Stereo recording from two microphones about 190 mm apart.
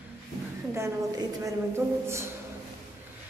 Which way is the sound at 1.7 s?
15° right (ahead or behind).